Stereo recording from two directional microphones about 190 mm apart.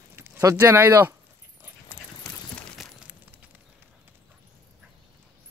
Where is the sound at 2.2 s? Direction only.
Centre (ahead or behind).